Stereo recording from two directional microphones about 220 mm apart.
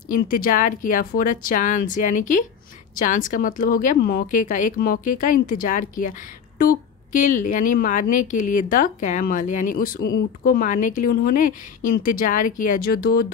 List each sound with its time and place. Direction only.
0.1 s a woman's voice: 40° left (ahead or behind)